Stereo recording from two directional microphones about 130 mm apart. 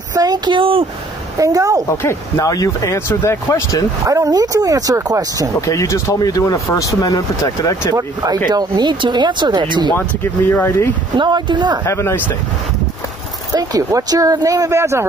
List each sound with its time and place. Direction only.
0.1 s speech: 30° right (ahead or behind)
1.4 s speech: 25° right (ahead or behind)
1.9 s speech: 25° left (ahead or behind)
4.0 s speech: 25° right (ahead or behind)
5.7 s speech: 25° left (ahead or behind)
7.9 s speech: 30° right (ahead or behind)
10.5 s speech: 20° left (ahead or behind)
11.1 s speech: 35° right (ahead or behind)
11.8 s speech: 20° left (ahead or behind)
13.5 s speech: 25° right (ahead or behind)